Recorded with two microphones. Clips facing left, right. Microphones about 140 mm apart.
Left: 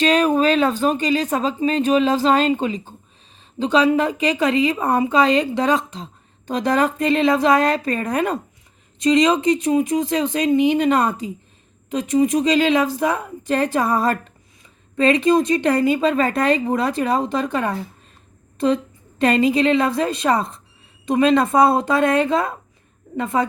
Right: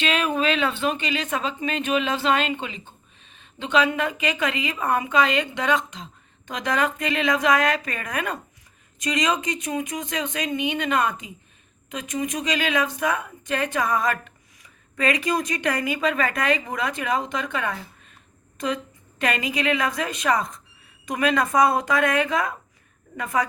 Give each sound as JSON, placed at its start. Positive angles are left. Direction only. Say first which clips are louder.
{"t": 0.0, "sound": "a woman's voice", "louder": "left 7 dB", "side_deg": 40}